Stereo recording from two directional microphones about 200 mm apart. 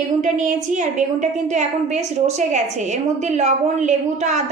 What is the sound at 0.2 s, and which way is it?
A woman's voice, 40° right (ahead or behind).